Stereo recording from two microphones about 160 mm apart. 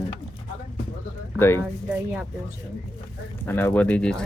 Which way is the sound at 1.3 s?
15° left (ahead or behind).